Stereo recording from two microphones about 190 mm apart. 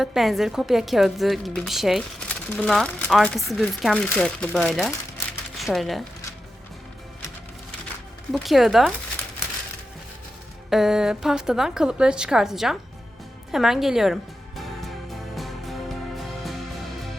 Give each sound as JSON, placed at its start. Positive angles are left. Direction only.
{"t": 0.0, "sound": "a woman's voice", "side_deg": 0}
{"t": 8.3, "sound": "a woman's voice", "side_deg": 0}
{"t": 10.7, "sound": "a woman's voice", "side_deg": 0}
{"t": 13.5, "sound": "music", "side_deg": 0}